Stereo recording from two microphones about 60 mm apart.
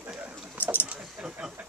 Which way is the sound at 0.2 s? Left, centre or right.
Right.